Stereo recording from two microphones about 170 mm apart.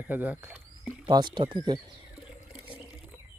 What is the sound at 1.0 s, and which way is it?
Speech, 25° right (ahead or behind).